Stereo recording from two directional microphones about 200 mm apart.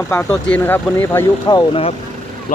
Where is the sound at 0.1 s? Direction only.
10° left (ahead or behind).